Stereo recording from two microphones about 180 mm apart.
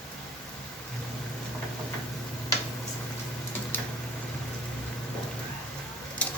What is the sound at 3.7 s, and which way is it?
Typing, 10° left (ahead or behind).